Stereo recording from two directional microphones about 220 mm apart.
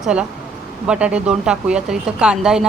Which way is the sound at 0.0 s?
5° right (ahead or behind).